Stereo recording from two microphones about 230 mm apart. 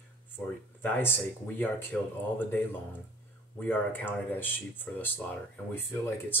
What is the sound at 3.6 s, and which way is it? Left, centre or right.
Speech, centre.